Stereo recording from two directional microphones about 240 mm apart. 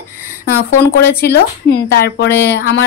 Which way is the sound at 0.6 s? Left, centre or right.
Left.